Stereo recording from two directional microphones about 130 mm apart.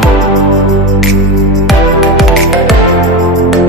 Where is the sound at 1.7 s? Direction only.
Centre (ahead or behind).